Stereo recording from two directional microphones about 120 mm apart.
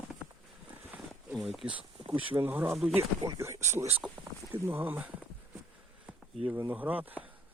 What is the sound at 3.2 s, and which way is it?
Speech, 25° right (ahead or behind).